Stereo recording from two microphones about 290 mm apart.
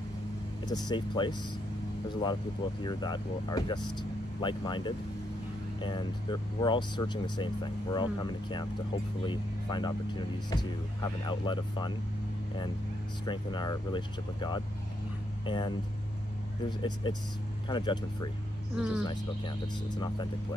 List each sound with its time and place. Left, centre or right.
0.7 s speech: centre
13.2 s speech: centre
18.8 s speech: centre
19.0 s speech: centre